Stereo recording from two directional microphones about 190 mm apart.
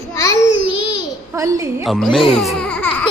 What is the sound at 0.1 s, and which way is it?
Child singing, 15° left (ahead or behind).